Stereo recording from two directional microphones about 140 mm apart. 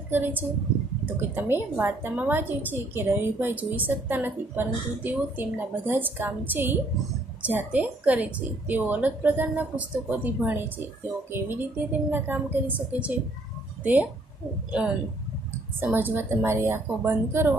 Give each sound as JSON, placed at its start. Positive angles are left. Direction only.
{"t": 0.1, "sound": "a woman's voice", "side_deg": -15}
{"t": 15.8, "sound": "a woman's voice", "side_deg": -15}